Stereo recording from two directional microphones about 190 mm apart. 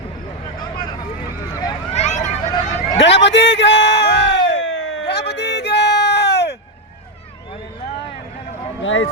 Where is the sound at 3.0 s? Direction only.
70° left (ahead or behind).